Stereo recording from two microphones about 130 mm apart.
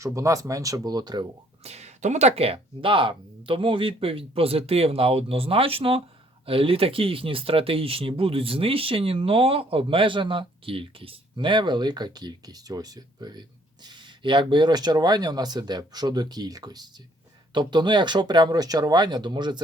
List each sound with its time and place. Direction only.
0.0 s speech: 25° right (ahead or behind)
1.6 s speech: 55° right (ahead or behind); by 19.5 s 35° right (ahead or behind)